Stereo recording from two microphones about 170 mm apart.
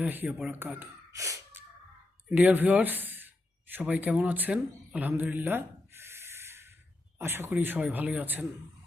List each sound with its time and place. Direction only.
0.0 s speech: 10° right (ahead or behind)